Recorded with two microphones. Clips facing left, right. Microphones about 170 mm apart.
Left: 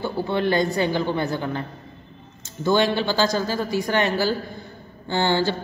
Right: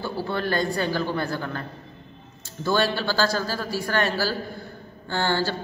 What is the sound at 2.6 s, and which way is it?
A man's voice, 20° left (ahead or behind).